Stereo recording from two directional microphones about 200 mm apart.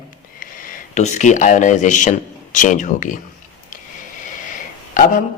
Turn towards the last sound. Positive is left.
turn(degrees=40)  # may be behind; listen again after turning